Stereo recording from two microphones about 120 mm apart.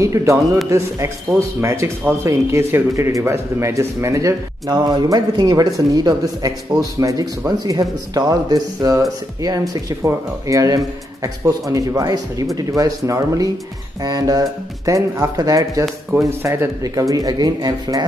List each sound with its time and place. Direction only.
0.0 s a man's voice: 25° right (ahead or behind)